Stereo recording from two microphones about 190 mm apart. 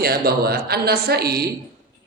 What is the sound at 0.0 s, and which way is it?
A man's voice, 55° right (ahead or behind).